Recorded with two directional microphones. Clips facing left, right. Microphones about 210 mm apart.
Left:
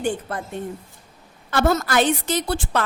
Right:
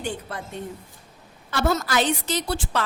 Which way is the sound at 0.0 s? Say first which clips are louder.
Left 6 dB; 50° left (ahead or behind).